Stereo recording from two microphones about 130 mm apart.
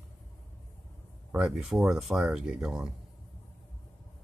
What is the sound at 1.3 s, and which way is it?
Speech, 5° right (ahead or behind).